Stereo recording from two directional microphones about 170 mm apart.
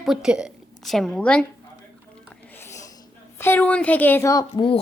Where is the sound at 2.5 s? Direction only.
15° left (ahead or behind).